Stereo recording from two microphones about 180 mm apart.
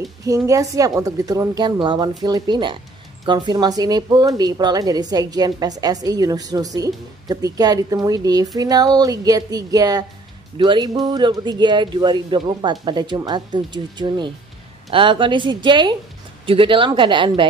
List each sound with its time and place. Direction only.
0.2 s a woman's voice: 20° right (ahead or behind)